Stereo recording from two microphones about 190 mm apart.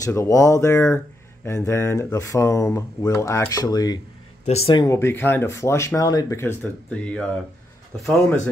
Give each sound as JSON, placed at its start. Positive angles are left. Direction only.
{"t": 0.0, "sound": "speech", "side_deg": 15}
{"t": 4.5, "sound": "speech", "side_deg": 30}
{"t": 4.8, "sound": "speech", "side_deg": 15}